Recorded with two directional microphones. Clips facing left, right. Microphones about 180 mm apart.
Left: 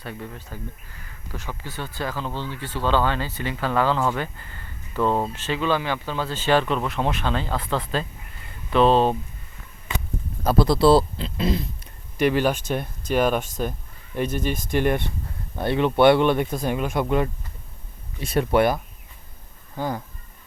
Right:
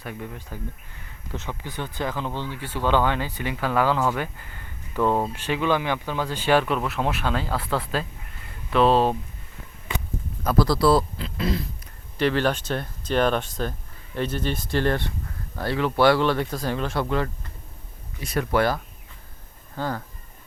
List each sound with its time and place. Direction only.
0.0 s speech: 10° right (ahead or behind)
10.4 s speech: 25° left (ahead or behind)